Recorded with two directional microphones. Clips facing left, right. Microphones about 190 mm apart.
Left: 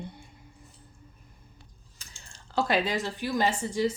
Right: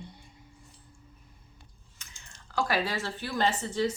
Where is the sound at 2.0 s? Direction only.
35° left (ahead or behind); by 3.9 s 10° left (ahead or behind).